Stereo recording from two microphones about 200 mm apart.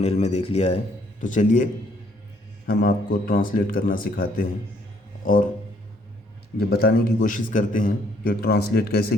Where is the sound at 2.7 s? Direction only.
50° left (ahead or behind).